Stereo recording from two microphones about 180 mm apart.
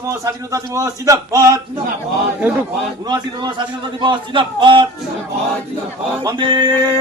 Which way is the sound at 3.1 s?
25° right (ahead or behind).